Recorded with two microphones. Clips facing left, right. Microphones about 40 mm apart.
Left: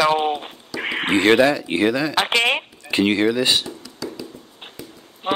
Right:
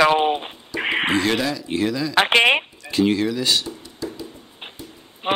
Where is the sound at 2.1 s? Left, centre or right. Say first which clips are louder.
Right 3 dB; right.